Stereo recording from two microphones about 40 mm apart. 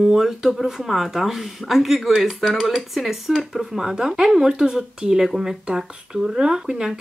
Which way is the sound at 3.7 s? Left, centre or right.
Centre.